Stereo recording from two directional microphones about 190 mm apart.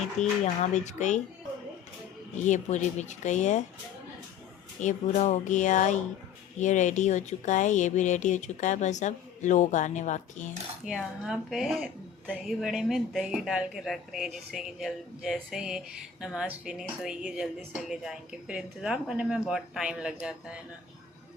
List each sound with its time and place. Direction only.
0.2 s speech: 40° left (ahead or behind)
2.4 s speech: 40° left (ahead or behind)
4.8 s speech: 40° left (ahead or behind)
10.8 s speech: 5° right (ahead or behind)